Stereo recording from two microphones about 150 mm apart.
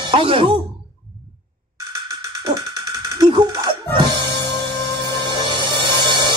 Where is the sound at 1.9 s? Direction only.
20° right (ahead or behind).